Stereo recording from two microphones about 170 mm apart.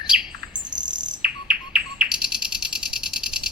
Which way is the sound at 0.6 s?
25° right (ahead or behind).